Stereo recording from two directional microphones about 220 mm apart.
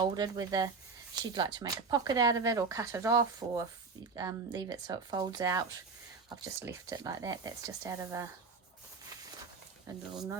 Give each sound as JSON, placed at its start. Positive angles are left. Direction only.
{"t": 0.0, "sound": "speech", "side_deg": -20}
{"t": 9.9, "sound": "speech", "side_deg": -15}